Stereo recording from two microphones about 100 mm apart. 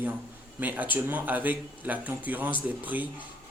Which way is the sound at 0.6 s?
15° right (ahead or behind).